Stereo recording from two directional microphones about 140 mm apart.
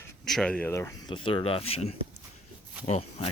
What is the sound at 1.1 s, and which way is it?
Speech, 35° left (ahead or behind).